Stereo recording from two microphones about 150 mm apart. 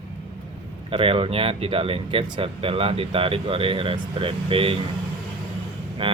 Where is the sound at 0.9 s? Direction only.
40° right (ahead or behind).